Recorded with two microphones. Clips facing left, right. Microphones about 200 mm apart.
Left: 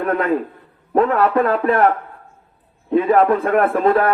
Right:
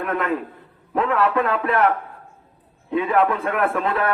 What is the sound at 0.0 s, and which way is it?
A man's voice, 40° left (ahead or behind).